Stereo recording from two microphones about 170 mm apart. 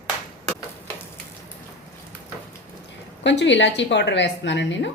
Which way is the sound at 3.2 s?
90° left.